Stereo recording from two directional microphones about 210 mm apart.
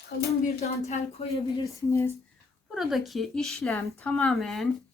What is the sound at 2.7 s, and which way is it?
Speech, centre (ahead or behind).